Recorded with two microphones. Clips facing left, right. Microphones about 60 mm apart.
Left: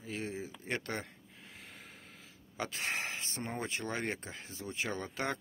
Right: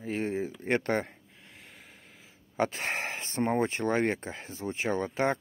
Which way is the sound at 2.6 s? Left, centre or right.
Right.